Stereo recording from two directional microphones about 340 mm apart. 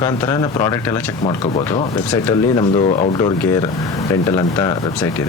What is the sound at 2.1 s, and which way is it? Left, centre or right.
Speech, centre.